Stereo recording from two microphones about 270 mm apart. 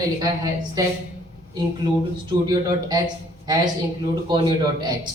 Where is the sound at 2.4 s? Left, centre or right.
Centre.